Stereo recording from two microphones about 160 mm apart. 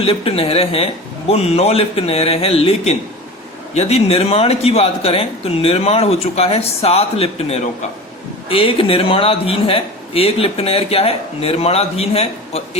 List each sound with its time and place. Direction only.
0.0 s a man's voice: 35° left (ahead or behind)